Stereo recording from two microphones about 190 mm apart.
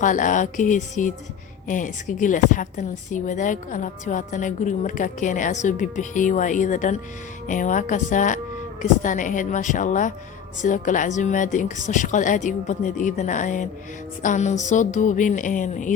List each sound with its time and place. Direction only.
0.0 s a woman's voice: 45° left (ahead or behind)